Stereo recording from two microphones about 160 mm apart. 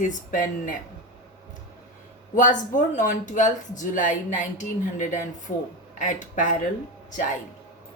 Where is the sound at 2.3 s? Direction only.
55° left (ahead or behind).